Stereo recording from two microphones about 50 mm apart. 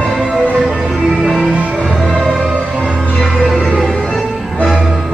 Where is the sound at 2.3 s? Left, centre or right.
Centre.